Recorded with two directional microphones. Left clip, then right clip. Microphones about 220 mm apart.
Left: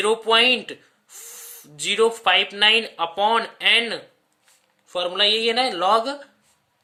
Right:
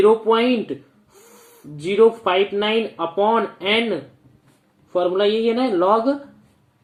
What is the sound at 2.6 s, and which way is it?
Speech, 65° left (ahead or behind).